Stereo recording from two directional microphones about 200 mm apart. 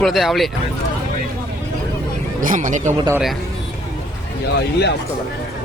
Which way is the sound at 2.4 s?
40° right (ahead or behind).